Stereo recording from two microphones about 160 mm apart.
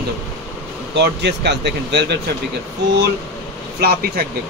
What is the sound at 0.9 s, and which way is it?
Speech, 90° right.